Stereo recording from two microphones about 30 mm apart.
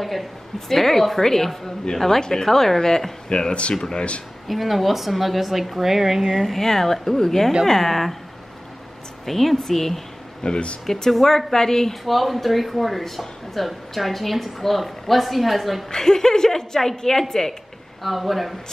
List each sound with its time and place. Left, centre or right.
0.0 s a woman's voice: centre
3.3 s speech: left
4.5 s speech: centre
6.2 s a woman's voice: centre
9.2 s a woman's voice: centre
10.4 s speech: left
10.9 s a woman's voice: centre
12.0 s speech: centre
15.9 s a woman's voice: centre
18.0 s speech: centre